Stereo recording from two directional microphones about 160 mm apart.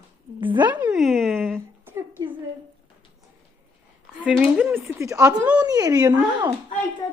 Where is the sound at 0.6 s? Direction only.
10° right (ahead or behind).